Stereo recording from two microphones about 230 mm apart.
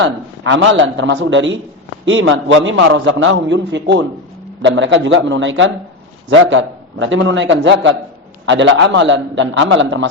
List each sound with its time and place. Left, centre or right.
0.0 s a man's voice: right